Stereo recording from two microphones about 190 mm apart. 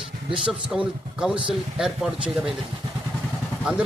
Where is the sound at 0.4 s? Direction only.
5° right (ahead or behind).